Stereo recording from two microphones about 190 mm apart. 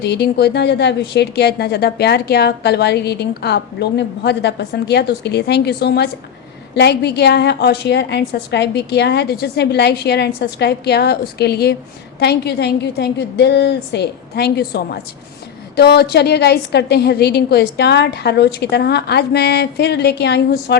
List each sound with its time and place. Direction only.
0.0 s a woman's voice: 60° left (ahead or behind)